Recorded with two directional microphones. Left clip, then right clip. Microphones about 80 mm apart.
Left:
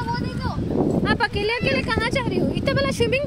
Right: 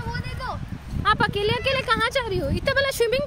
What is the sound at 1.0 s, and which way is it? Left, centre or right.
Speech, centre.